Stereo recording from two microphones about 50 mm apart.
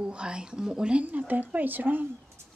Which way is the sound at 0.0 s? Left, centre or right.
Centre.